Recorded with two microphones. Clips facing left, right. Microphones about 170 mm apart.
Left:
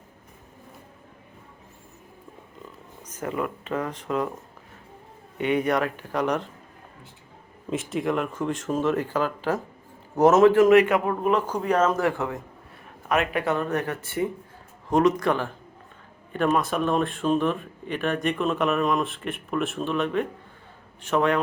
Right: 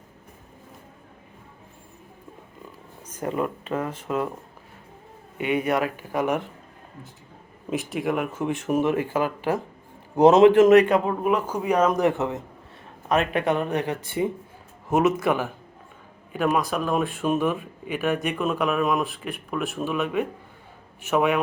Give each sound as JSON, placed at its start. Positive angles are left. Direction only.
{"t": 3.1, "sound": "a sound", "side_deg": -10}
{"t": 4.0, "sound": "speech", "side_deg": -10}
{"t": 5.4, "sound": "speech", "side_deg": -5}
{"t": 7.7, "sound": "a man's voice", "side_deg": 0}
{"t": 11.1, "sound": "speech", "side_deg": -10}